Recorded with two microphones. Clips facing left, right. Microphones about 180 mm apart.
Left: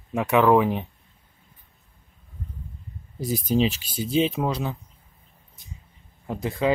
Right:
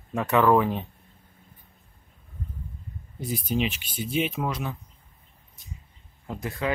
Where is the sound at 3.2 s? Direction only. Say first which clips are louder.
Left 5 dB; 35° left (ahead or behind).